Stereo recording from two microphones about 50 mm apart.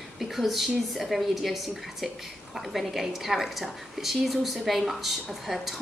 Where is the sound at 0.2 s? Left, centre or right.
Centre.